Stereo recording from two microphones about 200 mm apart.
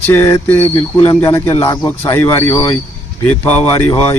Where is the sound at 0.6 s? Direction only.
30° left (ahead or behind).